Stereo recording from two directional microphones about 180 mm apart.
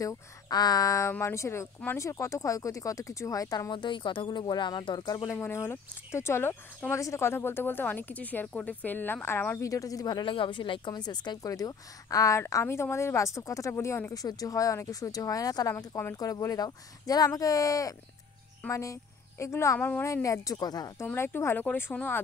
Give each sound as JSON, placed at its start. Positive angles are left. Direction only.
{"t": 0.0, "sound": "speech", "side_deg": 20}